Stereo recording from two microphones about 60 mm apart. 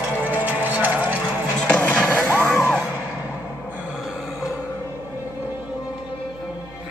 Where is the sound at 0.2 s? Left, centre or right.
Right.